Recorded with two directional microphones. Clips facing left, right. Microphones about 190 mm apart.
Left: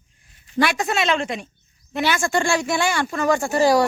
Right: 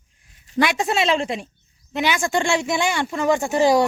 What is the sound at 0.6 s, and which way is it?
Speech, 25° right (ahead or behind).